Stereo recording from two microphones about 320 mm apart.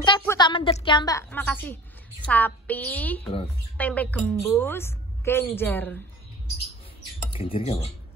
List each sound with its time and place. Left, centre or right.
0.0 s a woman's voice: centre
7.3 s a woman's voice: centre